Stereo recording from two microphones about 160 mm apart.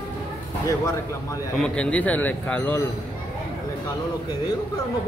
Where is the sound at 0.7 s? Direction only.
20° left (ahead or behind).